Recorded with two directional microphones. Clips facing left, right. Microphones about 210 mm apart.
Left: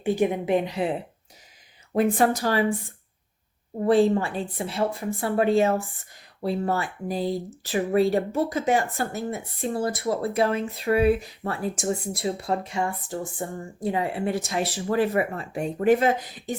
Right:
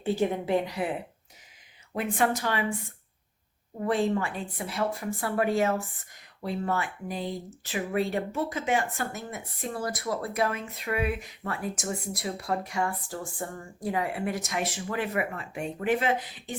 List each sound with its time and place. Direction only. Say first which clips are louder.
0.0 s speech: left 4 dB; 15° left (ahead or behind)
1.9 s speech: left 6 dB; 40° left (ahead or behind)
3.8 s speech: left 7 dB; 30° left (ahead or behind)